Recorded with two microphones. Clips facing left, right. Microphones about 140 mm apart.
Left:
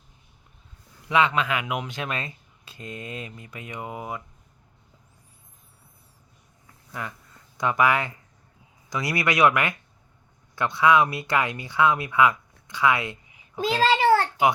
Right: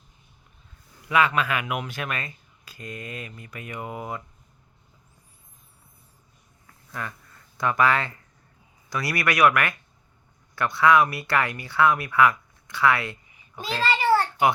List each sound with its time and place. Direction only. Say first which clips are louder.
1.0 s speech: even; 20° left (ahead or behind)
6.9 s speech: even; 15° left (ahead or behind)
13.8 s a sound: left 2 dB; 90° left